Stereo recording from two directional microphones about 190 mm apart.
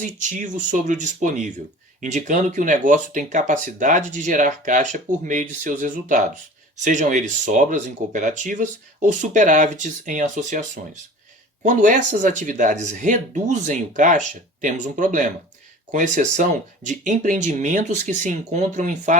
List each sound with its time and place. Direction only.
0.0 s speech: 40° right (ahead or behind)